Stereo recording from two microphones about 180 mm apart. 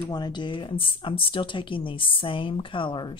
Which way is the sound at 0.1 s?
25° left (ahead or behind).